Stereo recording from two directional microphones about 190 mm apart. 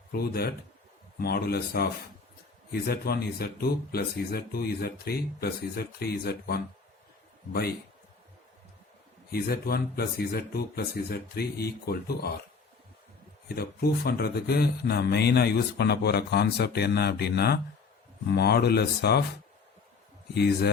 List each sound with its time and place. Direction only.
0.1 s speech: 55° left (ahead or behind)
9.3 s speech: 55° left (ahead or behind)
13.6 s speech: 55° left (ahead or behind)
20.3 s speech: 60° left (ahead or behind)